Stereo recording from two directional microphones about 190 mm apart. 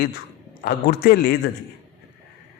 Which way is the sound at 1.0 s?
55° left (ahead or behind).